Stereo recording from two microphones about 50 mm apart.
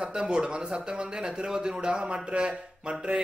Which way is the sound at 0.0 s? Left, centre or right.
Centre.